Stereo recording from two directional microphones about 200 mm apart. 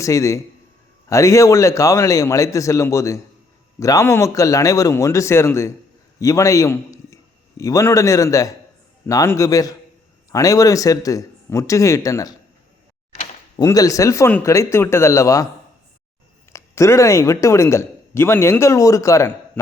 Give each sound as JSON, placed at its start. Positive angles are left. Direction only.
{"t": 0.0, "sound": "a man's voice", "side_deg": 15}
{"t": 13.6, "sound": "a man's voice", "side_deg": 15}
{"t": 16.5, "sound": "speech", "side_deg": 15}